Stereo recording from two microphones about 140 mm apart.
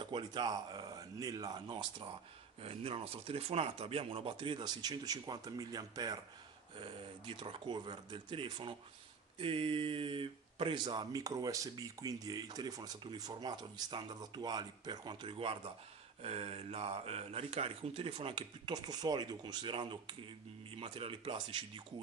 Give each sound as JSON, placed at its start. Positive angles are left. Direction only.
{"t": 0.0, "sound": "speech", "side_deg": -35}
{"t": 6.8, "sound": "speech", "side_deg": -40}